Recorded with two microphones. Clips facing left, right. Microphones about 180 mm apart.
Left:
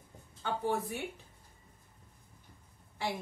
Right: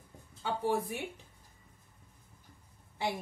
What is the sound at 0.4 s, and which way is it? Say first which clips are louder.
Speech: right 1 dB; 15° right (ahead or behind).